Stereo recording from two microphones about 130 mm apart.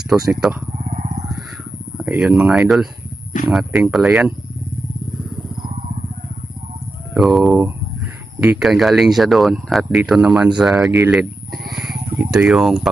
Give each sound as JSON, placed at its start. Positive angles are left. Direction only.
{"t": 0.1, "sound": "speech", "side_deg": -5}
{"t": 0.9, "sound": "vehicle", "side_deg": -70}
{"t": 2.0, "sound": "speech", "side_deg": -5}
{"t": 7.1, "sound": "a sound", "side_deg": 0}
{"t": 8.4, "sound": "speech", "side_deg": -5}